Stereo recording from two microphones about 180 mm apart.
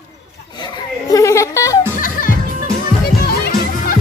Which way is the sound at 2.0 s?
50° left (ahead or behind).